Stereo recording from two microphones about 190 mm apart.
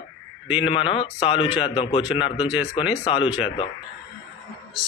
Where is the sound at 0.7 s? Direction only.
25° left (ahead or behind).